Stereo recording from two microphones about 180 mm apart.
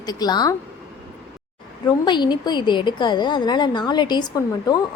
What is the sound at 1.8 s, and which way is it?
A woman's voice, 25° left (ahead or behind).